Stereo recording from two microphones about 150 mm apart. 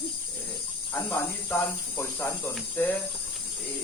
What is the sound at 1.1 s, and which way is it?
Speech, 15° left (ahead or behind).